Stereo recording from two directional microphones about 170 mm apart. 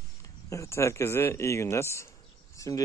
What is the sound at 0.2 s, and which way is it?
Speech, 20° left (ahead or behind).